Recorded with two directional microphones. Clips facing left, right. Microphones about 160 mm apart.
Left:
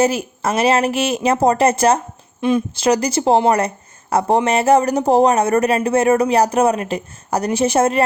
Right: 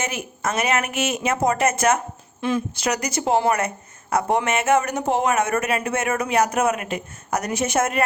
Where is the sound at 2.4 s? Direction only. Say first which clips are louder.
Left 6 dB; 20° left (ahead or behind).